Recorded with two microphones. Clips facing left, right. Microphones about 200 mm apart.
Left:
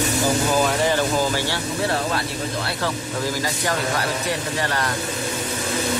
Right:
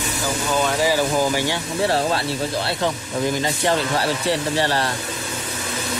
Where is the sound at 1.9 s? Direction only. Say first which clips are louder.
Right 6 dB; 30° right (ahead or behind).